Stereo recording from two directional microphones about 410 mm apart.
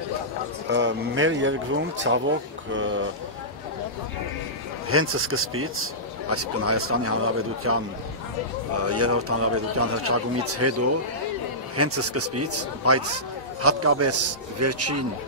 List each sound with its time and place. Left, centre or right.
0.7 s a man's voice: right
4.8 s a man's voice: right
8.8 s a man's voice: right